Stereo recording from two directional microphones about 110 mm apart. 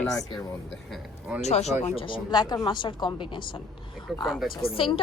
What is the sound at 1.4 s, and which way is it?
Speech, 85° left.